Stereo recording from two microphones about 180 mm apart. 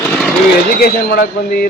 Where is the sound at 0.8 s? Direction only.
55° left (ahead or behind).